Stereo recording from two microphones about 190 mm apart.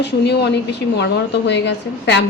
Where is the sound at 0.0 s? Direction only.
65° left (ahead or behind).